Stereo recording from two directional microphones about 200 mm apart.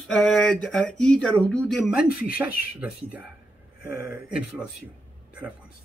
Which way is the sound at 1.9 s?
5° right (ahead or behind).